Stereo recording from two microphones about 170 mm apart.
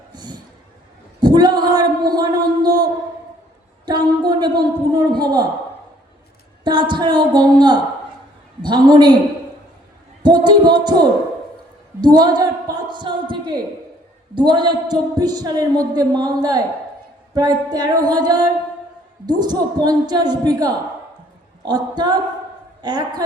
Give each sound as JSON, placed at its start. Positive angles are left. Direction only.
{"t": 0.1, "sound": "a sound", "side_deg": -25}
{"t": 5.2, "sound": "a woman's voice", "side_deg": -25}
{"t": 6.7, "sound": "a woman's voice", "side_deg": -25}
{"t": 10.2, "sound": "a woman's voice", "side_deg": -25}